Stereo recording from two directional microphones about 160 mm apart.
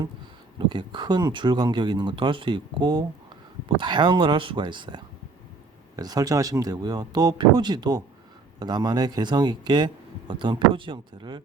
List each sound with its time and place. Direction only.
0.6 s speech: 30° right (ahead or behind)